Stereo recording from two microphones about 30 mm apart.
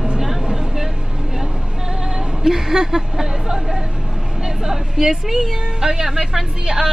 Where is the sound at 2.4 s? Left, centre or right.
Centre.